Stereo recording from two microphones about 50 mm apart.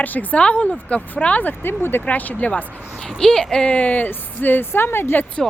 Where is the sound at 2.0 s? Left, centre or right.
Left.